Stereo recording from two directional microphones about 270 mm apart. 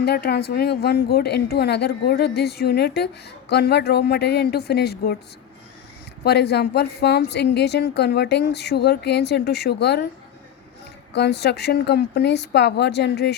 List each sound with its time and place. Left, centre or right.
0.0 s a woman's voice: left
6.2 s a woman's voice: left
11.1 s a woman's voice: left